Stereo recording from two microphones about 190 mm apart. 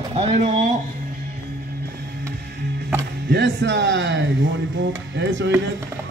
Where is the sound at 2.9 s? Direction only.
70° right (ahead or behind).